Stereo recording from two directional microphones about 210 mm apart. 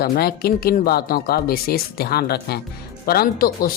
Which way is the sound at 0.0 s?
45° left (ahead or behind).